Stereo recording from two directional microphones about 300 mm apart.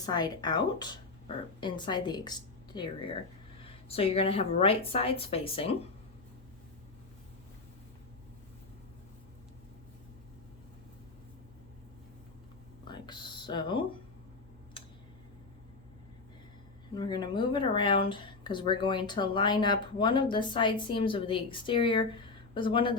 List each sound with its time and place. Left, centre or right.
0.0 s a woman's voice: centre
12.9 s a sound: centre
16.9 s speech: centre